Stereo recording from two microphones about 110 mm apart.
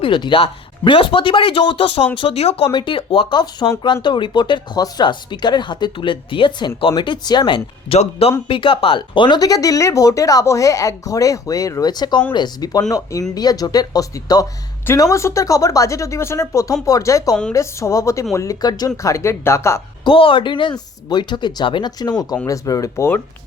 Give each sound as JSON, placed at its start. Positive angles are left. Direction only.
{"t": 0.0, "sound": "speech", "side_deg": 50}
{"t": 2.4, "sound": "speech", "side_deg": 75}
{"t": 2.7, "sound": "speech", "side_deg": 50}
{"t": 9.4, "sound": "speech", "side_deg": 35}
{"t": 20.1, "sound": "speech", "side_deg": 55}